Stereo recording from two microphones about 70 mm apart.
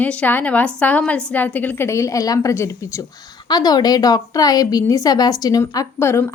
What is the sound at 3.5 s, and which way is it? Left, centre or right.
A woman's voice, left.